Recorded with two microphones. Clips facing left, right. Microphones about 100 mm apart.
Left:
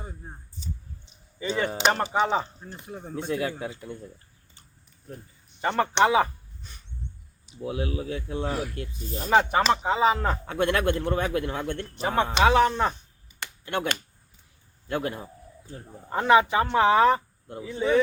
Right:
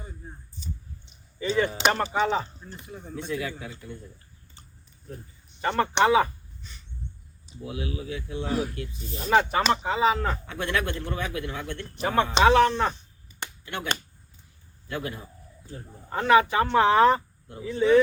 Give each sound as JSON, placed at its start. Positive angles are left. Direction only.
{"t": 1.9, "sound": "speech", "side_deg": 20}
{"t": 2.8, "sound": "a man's voice", "side_deg": 45}
{"t": 5.6, "sound": "speech", "side_deg": 20}
{"t": 7.6, "sound": "a man's voice", "side_deg": 50}
{"t": 9.3, "sound": "speech", "side_deg": 15}
{"t": 10.4, "sound": "a man's voice", "side_deg": 50}
{"t": 11.9, "sound": "speech", "side_deg": 20}
{"t": 14.8, "sound": "a man's voice", "side_deg": 50}
{"t": 16.1, "sound": "speech", "side_deg": 20}